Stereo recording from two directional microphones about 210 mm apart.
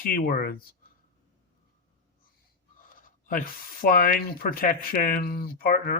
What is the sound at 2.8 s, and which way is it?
Speech, 40° left (ahead or behind).